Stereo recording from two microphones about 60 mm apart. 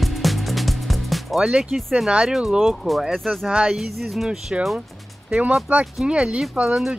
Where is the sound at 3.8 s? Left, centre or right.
Centre.